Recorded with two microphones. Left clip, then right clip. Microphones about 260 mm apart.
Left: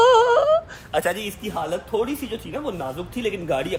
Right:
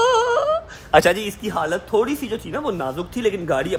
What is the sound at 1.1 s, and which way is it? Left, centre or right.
A man's voice, centre.